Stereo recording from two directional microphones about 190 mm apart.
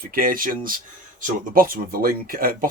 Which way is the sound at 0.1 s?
50° right (ahead or behind).